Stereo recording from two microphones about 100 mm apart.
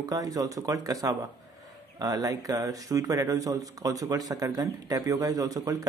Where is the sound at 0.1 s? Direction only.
35° right (ahead or behind).